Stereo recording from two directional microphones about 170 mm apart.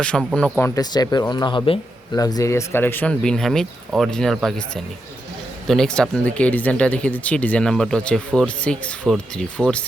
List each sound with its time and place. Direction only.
0.0 s speech: 5° left (ahead or behind)
0.8 s speech: 25° left (ahead or behind); by 9.8 s 5° left (ahead or behind)